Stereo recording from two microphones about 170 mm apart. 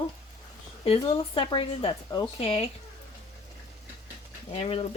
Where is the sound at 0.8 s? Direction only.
30° left (ahead or behind).